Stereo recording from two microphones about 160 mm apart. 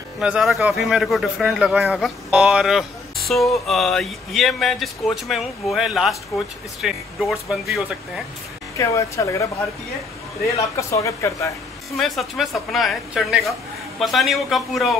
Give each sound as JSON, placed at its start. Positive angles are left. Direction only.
{"t": 0.2, "sound": "speech", "side_deg": -5}
{"t": 8.7, "sound": "speech", "side_deg": 20}
{"t": 10.8, "sound": "speech", "side_deg": 20}
{"t": 12.0, "sound": "speech", "side_deg": 0}